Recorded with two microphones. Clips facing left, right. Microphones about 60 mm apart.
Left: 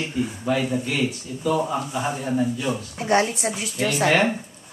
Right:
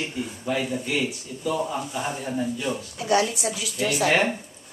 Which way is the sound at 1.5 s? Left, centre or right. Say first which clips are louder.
Left 4 dB; centre.